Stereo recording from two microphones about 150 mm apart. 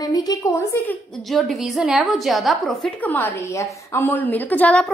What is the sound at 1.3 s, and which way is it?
A woman's voice, centre (ahead or behind).